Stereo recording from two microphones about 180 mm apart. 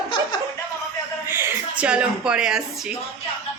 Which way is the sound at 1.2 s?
10° right (ahead or behind).